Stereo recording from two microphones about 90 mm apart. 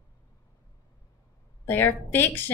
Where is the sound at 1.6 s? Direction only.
20° left (ahead or behind).